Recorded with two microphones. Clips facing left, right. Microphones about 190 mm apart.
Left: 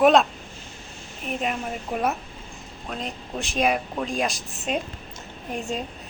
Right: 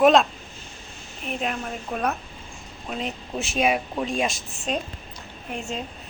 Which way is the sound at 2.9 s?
5° right (ahead or behind).